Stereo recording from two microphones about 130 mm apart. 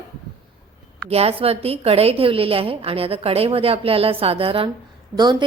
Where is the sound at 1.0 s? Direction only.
50° right (ahead or behind).